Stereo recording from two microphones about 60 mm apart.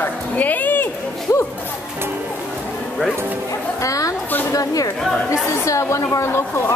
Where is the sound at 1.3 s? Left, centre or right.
Left.